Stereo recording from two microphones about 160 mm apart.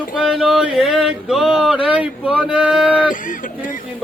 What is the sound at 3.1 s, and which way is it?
Speech, 55° left (ahead or behind).